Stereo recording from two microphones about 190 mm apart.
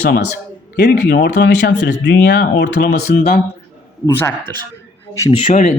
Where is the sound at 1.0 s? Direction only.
60° left (ahead or behind).